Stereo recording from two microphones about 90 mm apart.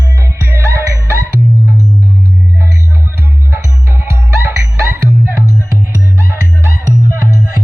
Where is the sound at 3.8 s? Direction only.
25° right (ahead or behind).